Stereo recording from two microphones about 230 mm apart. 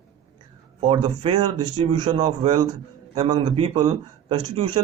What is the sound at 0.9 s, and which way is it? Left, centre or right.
A man's voice, right.